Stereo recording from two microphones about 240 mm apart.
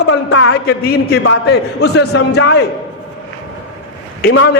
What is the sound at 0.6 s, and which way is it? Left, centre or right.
A man's voice, left.